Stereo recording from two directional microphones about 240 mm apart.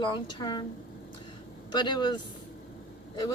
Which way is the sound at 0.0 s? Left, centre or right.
Centre.